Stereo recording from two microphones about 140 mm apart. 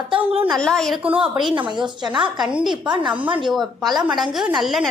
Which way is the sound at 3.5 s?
Centre (ahead or behind).